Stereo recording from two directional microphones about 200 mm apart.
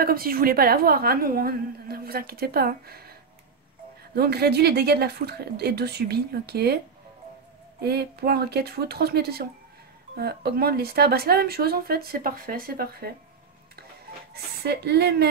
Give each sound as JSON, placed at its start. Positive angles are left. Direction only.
{"t": 0.0, "sound": "a woman's voice", "side_deg": -45}
{"t": 7.8, "sound": "a woman's voice", "side_deg": -50}
{"t": 14.3, "sound": "a woman's voice", "side_deg": -55}